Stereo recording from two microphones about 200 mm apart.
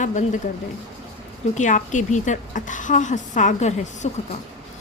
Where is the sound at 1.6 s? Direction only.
40° left (ahead or behind).